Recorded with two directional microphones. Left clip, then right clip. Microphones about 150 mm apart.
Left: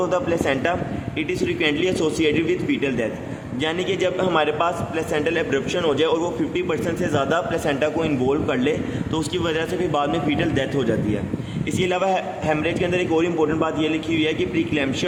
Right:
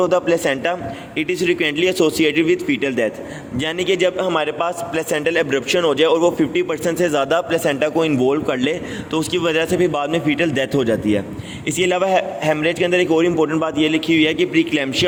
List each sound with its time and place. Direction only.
0.0 s a man's voice: 45° right (ahead or behind)